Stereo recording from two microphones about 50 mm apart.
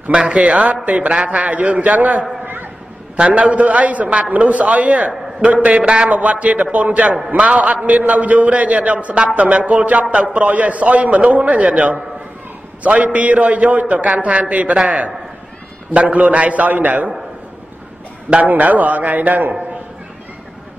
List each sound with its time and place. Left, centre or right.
0.1 s a man's voice: centre
2.4 s a sound: right
3.2 s a man's voice: right
18.3 s a man's voice: right